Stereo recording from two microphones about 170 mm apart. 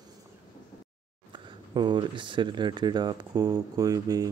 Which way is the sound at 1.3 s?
25° right (ahead or behind).